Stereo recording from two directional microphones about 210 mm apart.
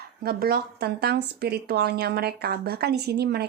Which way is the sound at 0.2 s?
45° right (ahead or behind).